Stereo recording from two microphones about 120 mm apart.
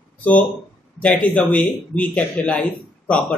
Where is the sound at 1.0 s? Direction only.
10° left (ahead or behind).